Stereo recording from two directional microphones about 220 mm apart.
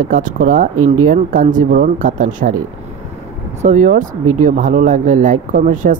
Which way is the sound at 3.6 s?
35° right (ahead or behind).